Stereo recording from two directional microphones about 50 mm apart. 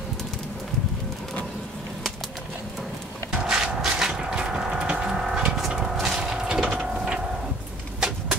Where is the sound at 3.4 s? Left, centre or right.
Centre.